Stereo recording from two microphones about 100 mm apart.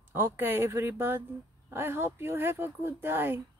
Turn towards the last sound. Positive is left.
turn(degrees=-20)  # may be behind; listen again after turning